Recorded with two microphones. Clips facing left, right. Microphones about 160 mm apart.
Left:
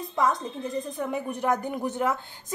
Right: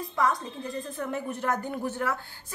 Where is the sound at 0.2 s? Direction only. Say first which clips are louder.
Left 2 dB; 20° left (ahead or behind).